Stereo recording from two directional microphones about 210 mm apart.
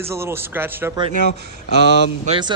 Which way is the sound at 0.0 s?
10° right (ahead or behind).